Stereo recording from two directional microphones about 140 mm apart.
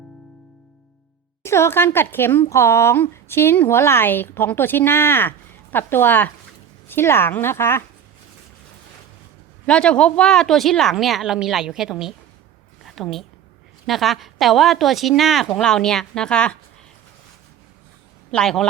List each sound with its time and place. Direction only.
1.4 s speech: 20° left (ahead or behind)
9.6 s a woman's voice: 5° left (ahead or behind)
12.8 s a sound: centre (ahead or behind)
13.8 s a woman's voice: centre (ahead or behind)
18.3 s speech: 5° left (ahead or behind)